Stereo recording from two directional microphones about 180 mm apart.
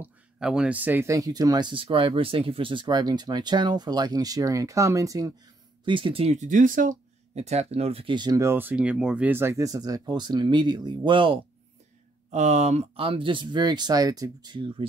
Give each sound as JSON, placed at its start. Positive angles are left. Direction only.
{"t": 0.0, "sound": "speech", "side_deg": -5}
{"t": 12.3, "sound": "speech", "side_deg": -40}